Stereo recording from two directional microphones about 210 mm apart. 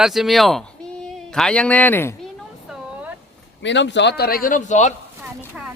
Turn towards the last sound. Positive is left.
turn(degrees=35)  # may be behind; listen again after turning